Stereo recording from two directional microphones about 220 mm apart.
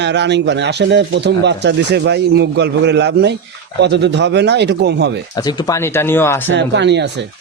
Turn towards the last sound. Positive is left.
turn(degrees=-50)  # may be behind; listen again after turning